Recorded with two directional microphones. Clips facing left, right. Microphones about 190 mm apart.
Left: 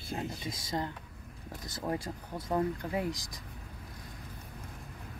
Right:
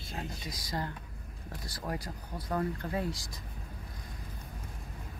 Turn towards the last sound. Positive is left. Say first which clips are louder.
# left 1 dB
turn(degrees=15)  # may be behind; listen again after turning